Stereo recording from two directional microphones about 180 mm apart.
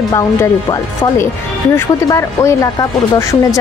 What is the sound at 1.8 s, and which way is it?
A woman's voice, 15° left (ahead or behind).